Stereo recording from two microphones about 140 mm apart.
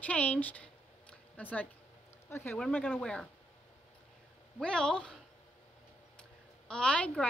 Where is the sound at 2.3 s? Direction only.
15° left (ahead or behind).